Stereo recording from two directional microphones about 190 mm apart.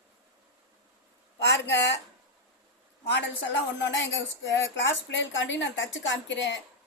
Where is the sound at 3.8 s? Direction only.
70° left (ahead or behind).